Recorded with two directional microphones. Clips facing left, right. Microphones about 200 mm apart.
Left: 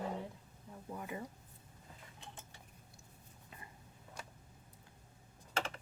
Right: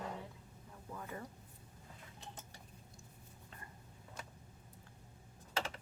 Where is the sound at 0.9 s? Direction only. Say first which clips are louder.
Left 3 dB; 15° left (ahead or behind).